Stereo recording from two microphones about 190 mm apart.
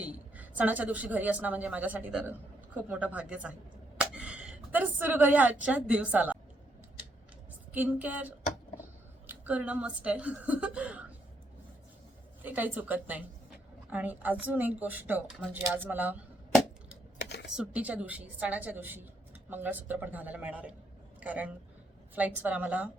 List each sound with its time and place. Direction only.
0.0 s a woman's voice: 10° right (ahead or behind)
3.9 s a sound: 5° right (ahead or behind)
7.7 s a woman's voice: 10° right (ahead or behind)
12.4 s a woman's voice: 10° right (ahead or behind)
17.2 s a sound: 65° left (ahead or behind)
17.6 s a woman's voice: 5° right (ahead or behind)